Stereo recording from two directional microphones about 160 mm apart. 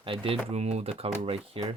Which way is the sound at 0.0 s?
35° right (ahead or behind).